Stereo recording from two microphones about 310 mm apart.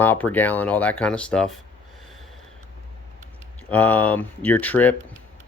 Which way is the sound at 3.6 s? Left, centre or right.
Centre.